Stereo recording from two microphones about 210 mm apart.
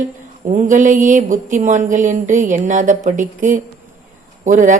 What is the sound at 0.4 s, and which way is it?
Speech, 35° right (ahead or behind).